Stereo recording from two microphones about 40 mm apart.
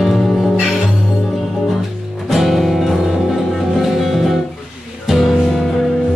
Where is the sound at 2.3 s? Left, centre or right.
Centre.